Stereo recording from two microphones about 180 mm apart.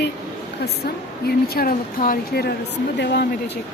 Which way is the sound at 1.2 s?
55° left (ahead or behind).